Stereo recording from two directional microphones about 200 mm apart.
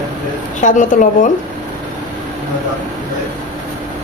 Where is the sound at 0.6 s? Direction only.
40° left (ahead or behind).